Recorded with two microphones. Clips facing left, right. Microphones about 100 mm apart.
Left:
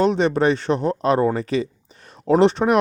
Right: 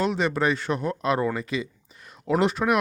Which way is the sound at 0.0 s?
30° left (ahead or behind).